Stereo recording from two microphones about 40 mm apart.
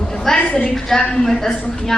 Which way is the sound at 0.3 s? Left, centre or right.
Left.